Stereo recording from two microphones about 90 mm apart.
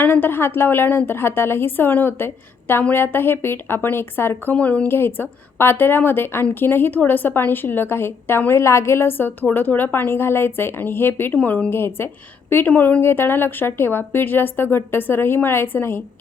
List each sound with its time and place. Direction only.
0.0 s a woman's voice: 25° left (ahead or behind)